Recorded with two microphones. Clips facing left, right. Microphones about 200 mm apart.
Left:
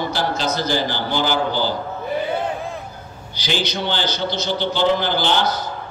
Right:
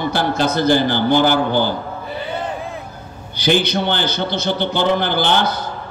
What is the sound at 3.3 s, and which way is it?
A man's voice, 55° right (ahead or behind).